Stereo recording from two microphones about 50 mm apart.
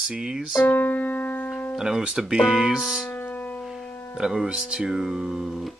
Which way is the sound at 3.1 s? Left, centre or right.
Left.